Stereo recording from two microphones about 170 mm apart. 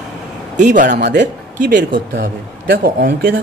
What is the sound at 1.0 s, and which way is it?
Speech, 80° right.